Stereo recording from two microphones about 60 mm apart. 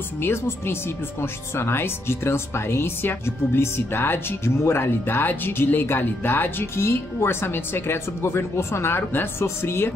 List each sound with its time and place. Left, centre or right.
0.2 s speech: left